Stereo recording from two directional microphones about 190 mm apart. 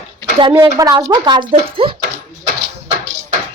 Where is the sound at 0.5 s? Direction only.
15° right (ahead or behind).